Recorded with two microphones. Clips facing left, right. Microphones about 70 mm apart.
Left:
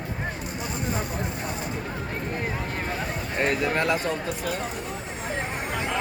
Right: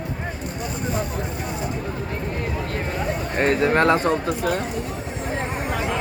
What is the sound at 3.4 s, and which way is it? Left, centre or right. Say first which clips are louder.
Speech: right 6 dB; right.